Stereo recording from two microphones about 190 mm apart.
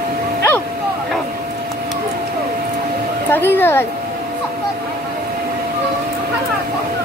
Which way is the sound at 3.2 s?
10° left (ahead or behind).